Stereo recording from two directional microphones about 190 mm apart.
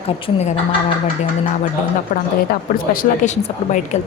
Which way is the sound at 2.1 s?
45° left (ahead or behind).